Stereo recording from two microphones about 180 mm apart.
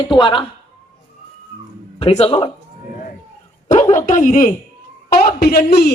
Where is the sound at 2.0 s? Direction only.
35° left (ahead or behind).